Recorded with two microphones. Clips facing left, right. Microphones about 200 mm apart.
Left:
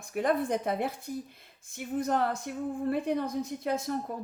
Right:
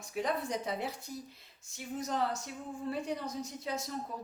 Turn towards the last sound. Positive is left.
turn(degrees=55)  # may be behind; listen again after turning